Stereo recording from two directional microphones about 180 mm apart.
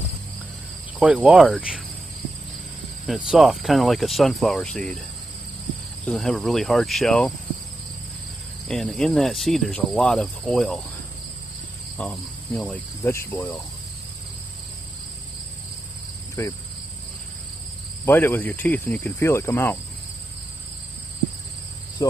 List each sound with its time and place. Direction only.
0.9 s cricket: 5° right (ahead or behind)
3.3 s cricket: centre (ahead or behind)
6.0 s cricket: centre (ahead or behind)
8.6 s cricket: centre (ahead or behind)
12.0 s speech: 5° left (ahead or behind)
16.4 s speech: 15° left (ahead or behind)
18.0 s speech: 10° left (ahead or behind)